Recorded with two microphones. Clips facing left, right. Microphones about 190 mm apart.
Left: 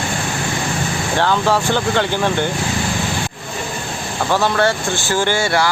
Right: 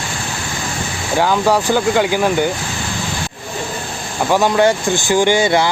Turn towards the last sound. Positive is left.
turn(degrees=-20)  # may be behind; listen again after turning